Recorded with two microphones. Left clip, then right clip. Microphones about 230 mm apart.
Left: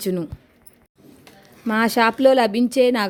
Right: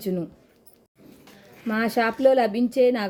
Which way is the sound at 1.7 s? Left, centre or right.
Left.